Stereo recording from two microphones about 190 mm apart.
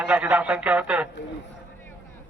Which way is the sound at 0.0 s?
5° right (ahead or behind).